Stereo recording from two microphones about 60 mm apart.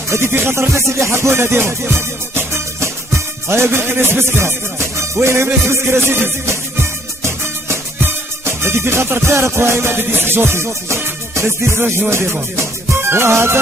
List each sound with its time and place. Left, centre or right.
0.3 s music: right
8.5 s music: right